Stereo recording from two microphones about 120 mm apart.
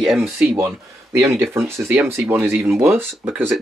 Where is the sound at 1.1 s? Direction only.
20° right (ahead or behind).